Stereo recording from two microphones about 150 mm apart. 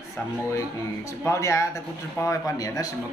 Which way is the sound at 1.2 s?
20° left (ahead or behind).